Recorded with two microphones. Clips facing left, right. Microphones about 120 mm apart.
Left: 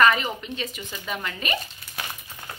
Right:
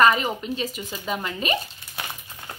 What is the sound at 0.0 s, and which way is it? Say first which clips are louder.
Speech: right 1 dB; 35° right (ahead or behind).